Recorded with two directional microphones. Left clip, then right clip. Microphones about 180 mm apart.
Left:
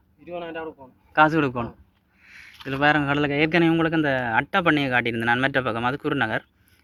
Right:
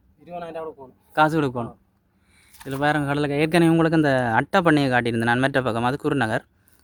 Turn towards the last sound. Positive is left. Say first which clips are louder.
# right 1 dB
turn(degrees=-35)  # may be behind; listen again after turning